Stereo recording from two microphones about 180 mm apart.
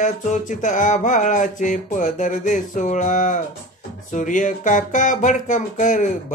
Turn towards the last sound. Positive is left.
turn(degrees=45)  # may be behind; listen again after turning